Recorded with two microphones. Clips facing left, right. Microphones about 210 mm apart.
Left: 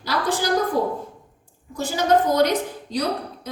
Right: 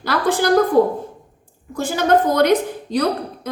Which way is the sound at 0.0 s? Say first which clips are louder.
Right 5 dB; 55° right (ahead or behind).